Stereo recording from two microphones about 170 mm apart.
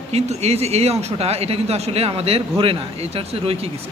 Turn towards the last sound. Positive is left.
turn(degrees=-35)  # may be behind; listen again after turning